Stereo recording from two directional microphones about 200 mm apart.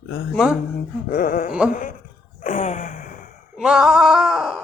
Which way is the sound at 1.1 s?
45° left (ahead or behind).